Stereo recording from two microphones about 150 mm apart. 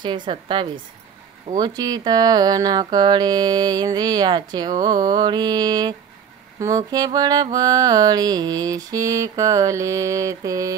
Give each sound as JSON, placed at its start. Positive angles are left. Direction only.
{"t": 0.0, "sound": "a woman's voice", "side_deg": -30}
{"t": 1.6, "sound": "mantra", "side_deg": -25}